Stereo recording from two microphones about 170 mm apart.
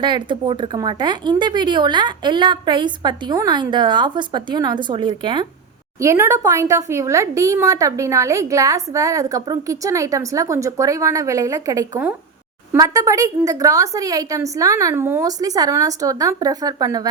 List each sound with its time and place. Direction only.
0.0 s speech: 30° right (ahead or behind)
6.0 s speech: 15° right (ahead or behind)